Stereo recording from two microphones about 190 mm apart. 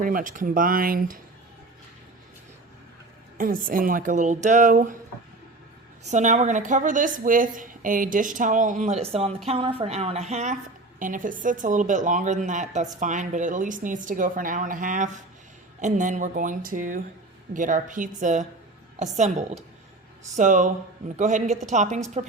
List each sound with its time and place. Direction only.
0.0 s a woman's voice: 45° right (ahead or behind)
3.3 s a woman's voice: 50° right (ahead or behind)
6.1 s a woman's voice: 40° right (ahead or behind)